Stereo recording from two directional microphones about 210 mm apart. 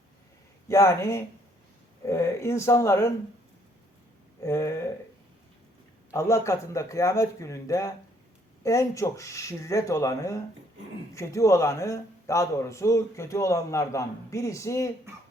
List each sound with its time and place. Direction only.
0.7 s a man's voice: 15° left (ahead or behind)
4.4 s a man's voice: 15° left (ahead or behind)
6.1 s a man's voice: 15° left (ahead or behind)